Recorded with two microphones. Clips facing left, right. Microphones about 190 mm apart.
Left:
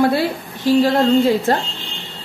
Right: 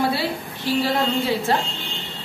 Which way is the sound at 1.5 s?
45° left (ahead or behind).